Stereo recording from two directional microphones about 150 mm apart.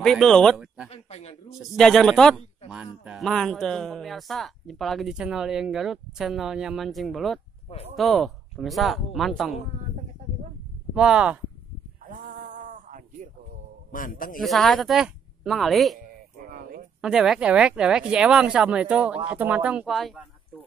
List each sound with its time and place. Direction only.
0.0 s speech: 5° left (ahead or behind)
0.8 s speech: 45° left (ahead or behind)
1.6 s a man's voice: 5° left (ahead or behind)
11.0 s a man's voice: 5° right (ahead or behind)
12.0 s a sound: 65° right (ahead or behind)
13.9 s a man's voice: 65° left (ahead or behind)
14.4 s a man's voice: centre (ahead or behind)
16.4 s a sound: 75° right (ahead or behind)
17.0 s speech: 5° right (ahead or behind)